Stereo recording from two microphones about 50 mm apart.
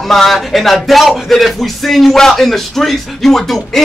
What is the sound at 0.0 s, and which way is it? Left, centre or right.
A man's voice, centre.